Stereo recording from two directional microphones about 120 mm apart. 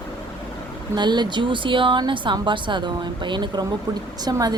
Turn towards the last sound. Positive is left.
turn(degrees=-35)  # may be behind; listen again after turning